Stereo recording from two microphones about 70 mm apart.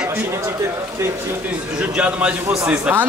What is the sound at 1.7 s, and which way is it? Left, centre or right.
A man's voice, centre.